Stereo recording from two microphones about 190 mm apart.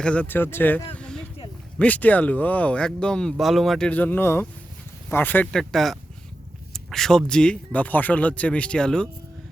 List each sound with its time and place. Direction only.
0.0 s speech: 5° left (ahead or behind)
0.9 s a sound: 5° left (ahead or behind)
1.8 s speech: 10° left (ahead or behind)